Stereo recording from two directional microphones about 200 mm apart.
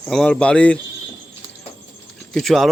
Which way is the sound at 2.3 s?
Centre (ahead or behind).